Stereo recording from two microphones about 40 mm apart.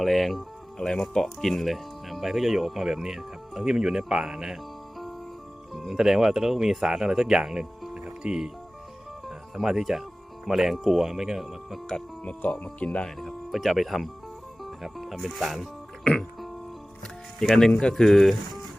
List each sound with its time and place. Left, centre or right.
0.0 s speech: centre
5.9 s speech: centre
7.9 s music: centre
8.2 s speech: centre
9.2 s music: centre
10.4 s speech: centre
12.2 s speech: left
13.1 s speech: centre
17.5 s speech: centre